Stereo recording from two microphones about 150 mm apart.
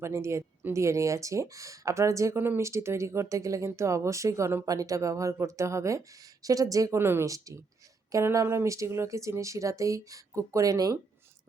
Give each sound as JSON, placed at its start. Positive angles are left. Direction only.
{"t": 0.0, "sound": "speech", "side_deg": -20}